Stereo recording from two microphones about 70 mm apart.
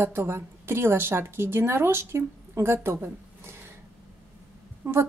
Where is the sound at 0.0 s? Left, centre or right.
Right.